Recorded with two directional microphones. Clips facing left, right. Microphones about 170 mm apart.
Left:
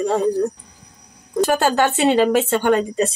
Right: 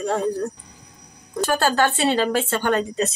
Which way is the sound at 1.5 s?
20° left (ahead or behind).